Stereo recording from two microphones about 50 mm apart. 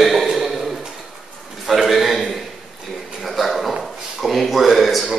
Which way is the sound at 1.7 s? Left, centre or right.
Centre.